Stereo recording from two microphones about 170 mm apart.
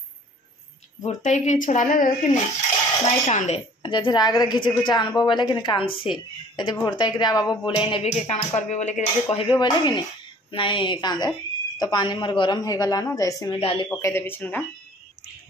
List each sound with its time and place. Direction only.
1.0 s speech: 45° left (ahead or behind)
3.8 s a woman's voice: 25° left (ahead or behind)
13.6 s speech: 35° left (ahead or behind)
13.8 s a man's voice: 15° left (ahead or behind)